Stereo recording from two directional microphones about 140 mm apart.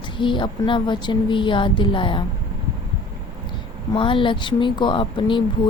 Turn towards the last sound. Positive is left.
turn(degrees=35)  # may be behind; listen again after turning